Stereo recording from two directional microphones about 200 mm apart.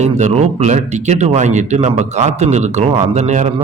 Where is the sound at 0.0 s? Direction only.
35° right (ahead or behind).